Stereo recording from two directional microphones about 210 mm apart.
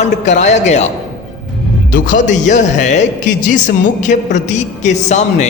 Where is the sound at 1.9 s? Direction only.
35° left (ahead or behind).